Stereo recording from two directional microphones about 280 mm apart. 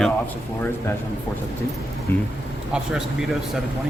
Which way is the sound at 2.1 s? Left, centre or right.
Centre.